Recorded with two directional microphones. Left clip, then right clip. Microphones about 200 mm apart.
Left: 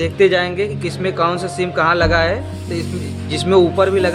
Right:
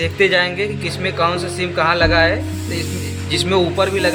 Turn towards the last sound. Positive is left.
turn(degrees=30)  # may be behind; listen again after turning